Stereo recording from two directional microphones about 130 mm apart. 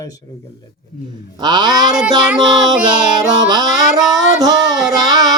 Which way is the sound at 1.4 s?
35° right (ahead or behind).